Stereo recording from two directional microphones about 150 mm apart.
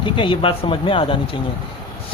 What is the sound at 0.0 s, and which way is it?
Speech, 35° left (ahead or behind).